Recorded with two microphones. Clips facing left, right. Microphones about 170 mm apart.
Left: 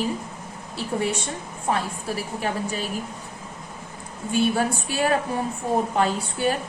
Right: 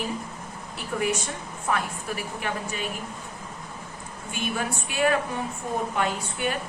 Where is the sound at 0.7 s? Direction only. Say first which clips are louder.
Left 2 dB; 30° left (ahead or behind).